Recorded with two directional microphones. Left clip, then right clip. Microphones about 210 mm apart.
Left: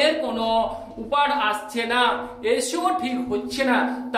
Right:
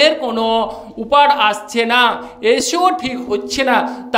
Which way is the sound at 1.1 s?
50° right (ahead or behind).